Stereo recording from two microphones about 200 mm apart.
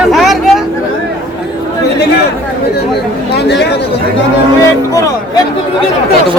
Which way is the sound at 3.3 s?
60° left (ahead or behind).